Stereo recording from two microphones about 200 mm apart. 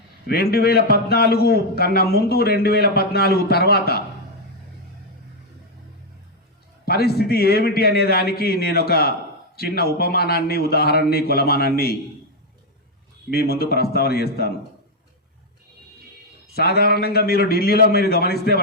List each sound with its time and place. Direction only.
0.3 s a man's voice: 50° left (ahead or behind)
6.8 s a man's voice: 50° left (ahead or behind)
13.3 s a man's voice: 50° left (ahead or behind)
16.6 s a man's voice: 50° left (ahead or behind)